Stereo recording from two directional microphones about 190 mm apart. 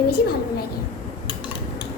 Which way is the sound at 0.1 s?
50° left (ahead or behind).